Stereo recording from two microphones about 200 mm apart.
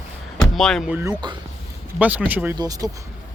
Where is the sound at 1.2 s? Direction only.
20° right (ahead or behind).